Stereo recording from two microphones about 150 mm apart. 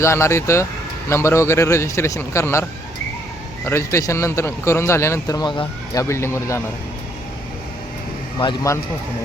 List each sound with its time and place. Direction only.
0.0 s a man's voice: 20° left (ahead or behind)
3.7 s a man's voice: 20° left (ahead or behind)
6.0 s speech: 20° left (ahead or behind)
8.4 s speech: 35° left (ahead or behind)